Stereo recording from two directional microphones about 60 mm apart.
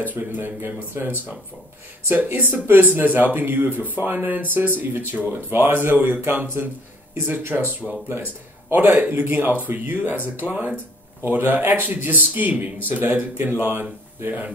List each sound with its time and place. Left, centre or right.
0.1 s speech: right
7.8 s speech: centre
8.6 s a man's voice: right
11.2 s speech: right